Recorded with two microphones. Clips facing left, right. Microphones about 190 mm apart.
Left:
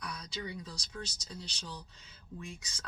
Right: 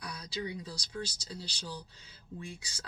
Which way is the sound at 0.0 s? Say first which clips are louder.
Right 3 dB; 30° right (ahead or behind).